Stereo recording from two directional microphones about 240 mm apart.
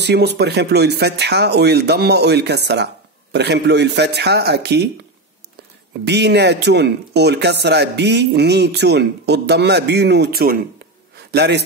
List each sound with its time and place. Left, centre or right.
0.0 s speech: right
6.0 s speech: right